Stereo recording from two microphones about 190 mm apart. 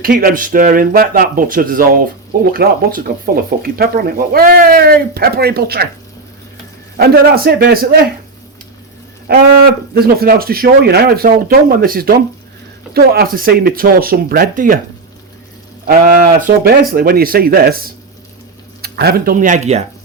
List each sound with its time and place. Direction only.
0.0 s speech: 50° right (ahead or behind)
6.9 s speech: 50° right (ahead or behind)
9.3 s livestock: 55° right (ahead or behind)
10.0 s speech: 55° right (ahead or behind)
15.9 s speech: 50° right (ahead or behind); by 19.8 s 35° right (ahead or behind)